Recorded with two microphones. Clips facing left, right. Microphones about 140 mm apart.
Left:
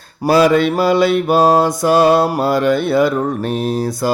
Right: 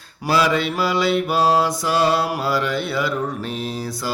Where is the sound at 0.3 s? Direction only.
50° left (ahead or behind).